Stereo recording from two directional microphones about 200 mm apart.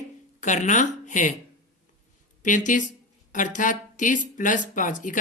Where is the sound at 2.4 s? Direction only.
40° left (ahead or behind).